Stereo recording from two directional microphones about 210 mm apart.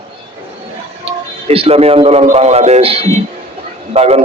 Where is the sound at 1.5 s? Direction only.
30° right (ahead or behind).